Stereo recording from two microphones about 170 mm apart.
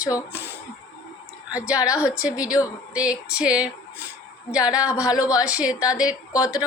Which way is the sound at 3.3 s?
5° right (ahead or behind).